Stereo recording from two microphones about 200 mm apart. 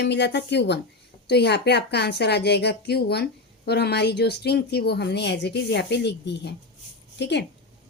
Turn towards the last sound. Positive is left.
turn(degrees=60)  # may be behind; listen again after turning